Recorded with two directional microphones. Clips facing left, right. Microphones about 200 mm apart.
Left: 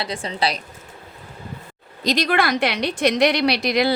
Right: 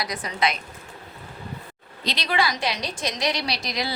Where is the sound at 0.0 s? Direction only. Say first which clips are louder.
Left 2 dB; 30° left (ahead or behind).